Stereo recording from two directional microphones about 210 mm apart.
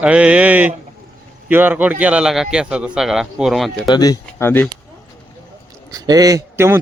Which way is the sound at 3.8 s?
20° left (ahead or behind).